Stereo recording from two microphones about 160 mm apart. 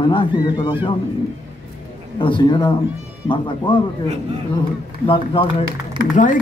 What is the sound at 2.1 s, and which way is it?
Speech, 30° left (ahead or behind).